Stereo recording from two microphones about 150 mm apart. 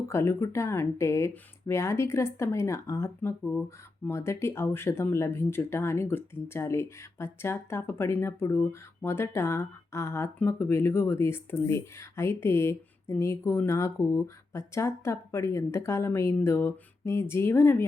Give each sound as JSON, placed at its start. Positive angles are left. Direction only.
{"t": 0.1, "sound": "speech", "side_deg": 15}